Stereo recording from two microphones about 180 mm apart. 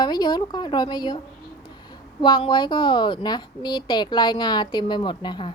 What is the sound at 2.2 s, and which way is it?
A woman's voice, 25° left (ahead or behind).